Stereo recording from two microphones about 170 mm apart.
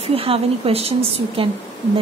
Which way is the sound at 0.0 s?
35° right (ahead or behind).